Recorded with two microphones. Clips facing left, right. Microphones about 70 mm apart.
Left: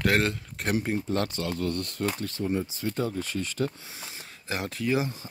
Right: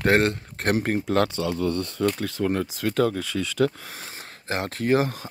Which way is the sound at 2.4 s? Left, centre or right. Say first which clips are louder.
Right 4 dB; right.